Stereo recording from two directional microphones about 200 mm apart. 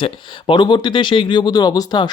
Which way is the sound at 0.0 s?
25° left (ahead or behind).